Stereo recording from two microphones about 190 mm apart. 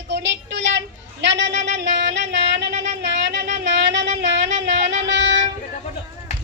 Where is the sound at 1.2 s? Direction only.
70° right (ahead or behind).